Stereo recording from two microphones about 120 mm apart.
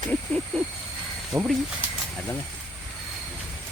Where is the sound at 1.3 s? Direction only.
25° right (ahead or behind).